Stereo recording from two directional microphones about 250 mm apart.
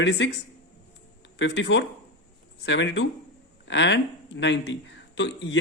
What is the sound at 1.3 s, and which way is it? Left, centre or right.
A man's voice, left.